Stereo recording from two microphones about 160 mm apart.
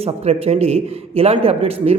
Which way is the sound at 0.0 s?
40° right (ahead or behind).